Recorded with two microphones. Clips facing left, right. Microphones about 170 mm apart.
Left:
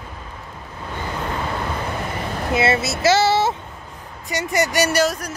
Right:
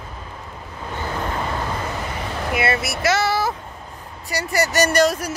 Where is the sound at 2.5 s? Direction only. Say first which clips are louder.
Left 3 dB; 25° left (ahead or behind); by 5.2 s 5° left (ahead or behind).